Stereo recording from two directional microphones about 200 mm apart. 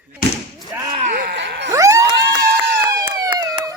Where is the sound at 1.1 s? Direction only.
55° right (ahead or behind).